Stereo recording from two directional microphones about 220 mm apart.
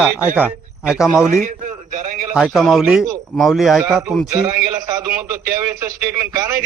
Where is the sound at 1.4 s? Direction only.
35° right (ahead or behind).